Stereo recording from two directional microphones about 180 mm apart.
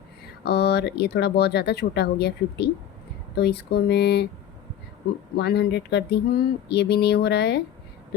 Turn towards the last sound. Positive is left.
turn(degrees=70)  # may be behind; listen again after turning